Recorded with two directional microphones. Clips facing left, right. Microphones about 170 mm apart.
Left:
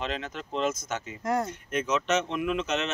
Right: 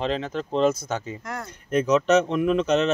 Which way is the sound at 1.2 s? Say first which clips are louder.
Left 7 dB; 30° left (ahead or behind).